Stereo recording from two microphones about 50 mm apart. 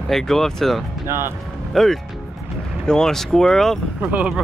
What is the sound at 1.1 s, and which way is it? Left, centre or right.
Speech, right.